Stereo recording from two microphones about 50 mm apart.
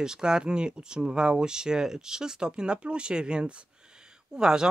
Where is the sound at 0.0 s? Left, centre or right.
Centre.